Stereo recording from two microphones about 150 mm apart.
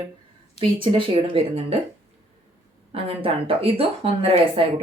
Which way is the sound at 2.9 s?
40° right (ahead or behind).